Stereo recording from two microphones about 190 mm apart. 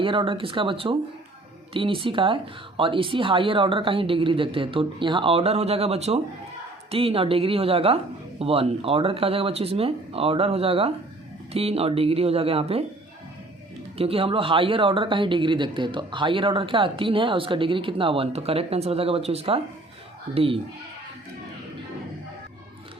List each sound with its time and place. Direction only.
0.0 s speech: 25° right (ahead or behind)
14.0 s speech: 30° right (ahead or behind)